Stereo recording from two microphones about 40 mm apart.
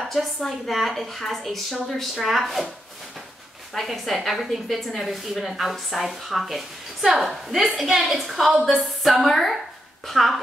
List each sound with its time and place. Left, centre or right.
0.0 s a sound: centre
0.5 s speech: centre
3.7 s speech: centre